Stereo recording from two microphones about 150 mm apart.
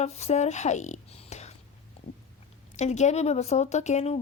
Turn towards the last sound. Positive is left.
turn(degrees=45)  # may be behind; listen again after turning